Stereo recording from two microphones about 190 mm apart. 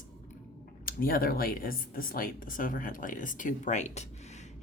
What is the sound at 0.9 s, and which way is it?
Speech, 50° left (ahead or behind).